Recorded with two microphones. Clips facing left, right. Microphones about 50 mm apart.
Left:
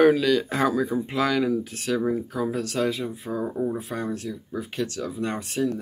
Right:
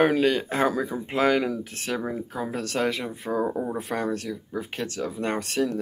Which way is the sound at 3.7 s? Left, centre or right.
Right.